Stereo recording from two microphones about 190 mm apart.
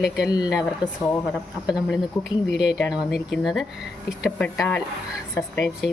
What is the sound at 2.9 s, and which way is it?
A woman's voice, centre (ahead or behind).